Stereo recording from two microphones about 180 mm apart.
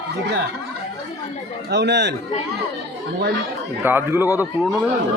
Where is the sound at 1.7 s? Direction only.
70° right (ahead or behind).